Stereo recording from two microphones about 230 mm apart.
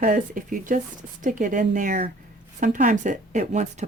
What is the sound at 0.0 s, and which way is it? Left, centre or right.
Speech, right.